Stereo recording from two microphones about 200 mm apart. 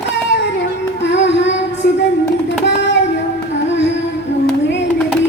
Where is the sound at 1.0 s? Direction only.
60° left (ahead or behind).